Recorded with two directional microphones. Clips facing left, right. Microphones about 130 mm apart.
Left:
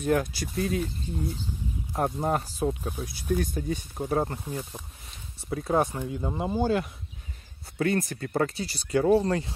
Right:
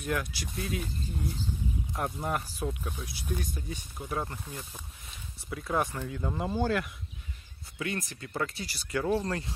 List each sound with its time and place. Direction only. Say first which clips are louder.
0.0 s speech: left 7 dB; 40° left (ahead or behind)
2.0 s speech: left 7 dB; 30° left (ahead or behind)
3.0 s speech: left 8 dB; 45° left (ahead or behind)
4.5 s speech: left 8 dB; 25° left (ahead or behind)
5.5 s speech: left 5 dB; 35° left (ahead or behind)
5.9 s speech: left 3 dB; 20° left (ahead or behind)
7.7 s speech: left 9 dB; 40° left (ahead or behind)
9.1 s speech: left 7 dB; 15° left (ahead or behind)